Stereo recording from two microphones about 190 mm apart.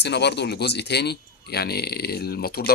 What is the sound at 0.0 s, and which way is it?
Speech, 65° left (ahead or behind).